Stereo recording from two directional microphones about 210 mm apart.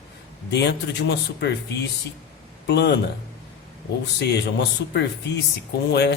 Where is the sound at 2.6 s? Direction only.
50° left (ahead or behind).